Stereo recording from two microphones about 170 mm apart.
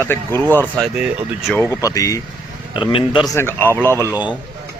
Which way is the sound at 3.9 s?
10° right (ahead or behind).